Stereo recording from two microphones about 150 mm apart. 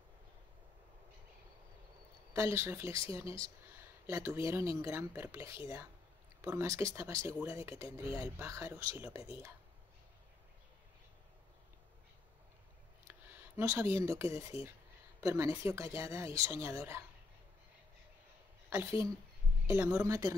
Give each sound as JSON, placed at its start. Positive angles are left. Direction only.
{"t": 2.3, "sound": "speech", "side_deg": -20}
{"t": 13.0, "sound": "speech", "side_deg": -15}
{"t": 18.7, "sound": "a woman's voice", "side_deg": -20}